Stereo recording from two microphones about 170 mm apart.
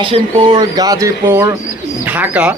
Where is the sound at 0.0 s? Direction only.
30° right (ahead or behind).